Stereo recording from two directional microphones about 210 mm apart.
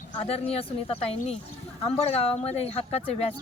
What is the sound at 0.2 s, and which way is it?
Speech, 30° left (ahead or behind).